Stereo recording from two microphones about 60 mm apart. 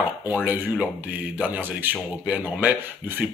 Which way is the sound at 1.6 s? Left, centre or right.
Right.